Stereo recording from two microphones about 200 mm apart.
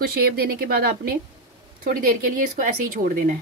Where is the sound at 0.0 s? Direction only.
50° right (ahead or behind).